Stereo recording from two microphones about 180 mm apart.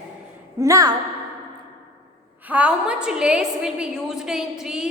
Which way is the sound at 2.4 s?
5° right (ahead or behind).